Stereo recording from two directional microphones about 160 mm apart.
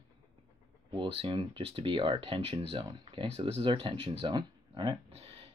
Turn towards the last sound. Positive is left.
turn(degrees=-30)  # may be behind; listen again after turning